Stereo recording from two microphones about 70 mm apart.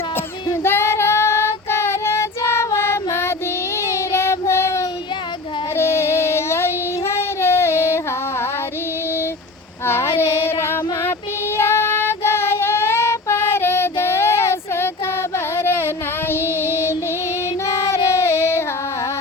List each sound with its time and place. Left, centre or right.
0.6 s child singing: left
9.8 s child singing: left
15.5 s a sound: left
16.3 s child singing: left